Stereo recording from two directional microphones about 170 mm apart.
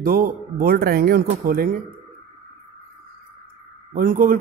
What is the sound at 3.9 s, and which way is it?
Speech, 55° right (ahead or behind).